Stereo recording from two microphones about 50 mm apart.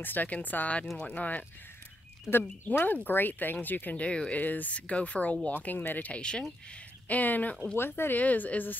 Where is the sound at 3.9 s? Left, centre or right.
Left.